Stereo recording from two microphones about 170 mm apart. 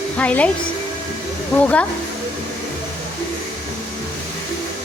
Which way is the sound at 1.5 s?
5° left (ahead or behind).